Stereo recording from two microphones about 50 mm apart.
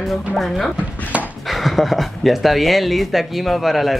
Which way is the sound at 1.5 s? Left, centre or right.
Centre.